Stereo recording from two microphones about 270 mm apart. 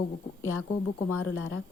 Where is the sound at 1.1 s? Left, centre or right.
Left.